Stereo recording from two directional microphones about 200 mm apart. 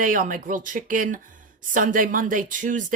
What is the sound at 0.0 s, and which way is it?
Speech, 40° right (ahead or behind).